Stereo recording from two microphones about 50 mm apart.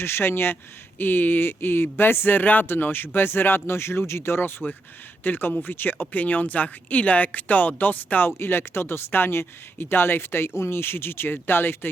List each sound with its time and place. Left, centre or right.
0.0 s speech: left
8.4 s speech: left